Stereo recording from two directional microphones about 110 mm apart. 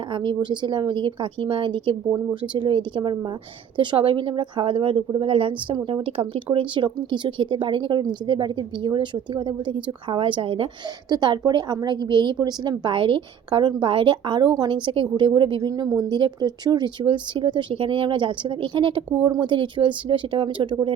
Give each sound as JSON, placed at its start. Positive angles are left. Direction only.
{"t": 0.1, "sound": "a woman's voice", "side_deg": -45}
{"t": 11.1, "sound": "a woman's voice", "side_deg": -40}